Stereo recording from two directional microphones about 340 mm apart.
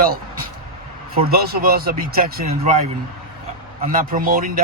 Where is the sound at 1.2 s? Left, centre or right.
Right.